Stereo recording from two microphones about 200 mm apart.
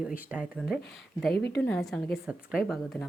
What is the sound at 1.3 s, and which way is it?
Speech, 55° left (ahead or behind).